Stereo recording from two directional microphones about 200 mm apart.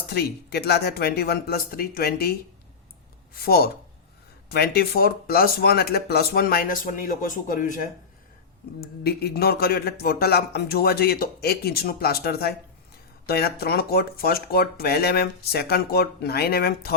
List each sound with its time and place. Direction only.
0.1 s a man's voice: 55° left (ahead or behind)
3.3 s a man's voice: 50° left (ahead or behind)